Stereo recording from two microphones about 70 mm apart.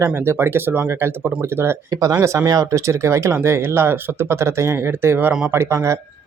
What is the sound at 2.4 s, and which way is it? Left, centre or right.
Speech, right.